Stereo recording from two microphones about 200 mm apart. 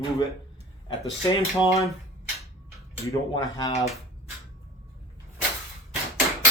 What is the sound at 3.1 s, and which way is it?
Speech, 20° left (ahead or behind).